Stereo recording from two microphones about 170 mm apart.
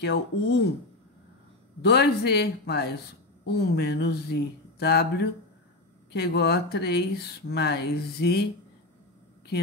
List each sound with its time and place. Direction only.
0.0 s speech: 90° left
1.8 s speech: 75° left (ahead or behind)